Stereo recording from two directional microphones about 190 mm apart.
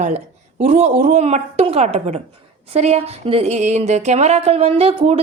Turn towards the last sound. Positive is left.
turn(degrees=-30)  # may be behind; listen again after turning